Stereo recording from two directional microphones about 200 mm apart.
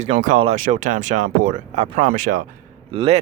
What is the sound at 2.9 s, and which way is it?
Speech, 25° right (ahead or behind).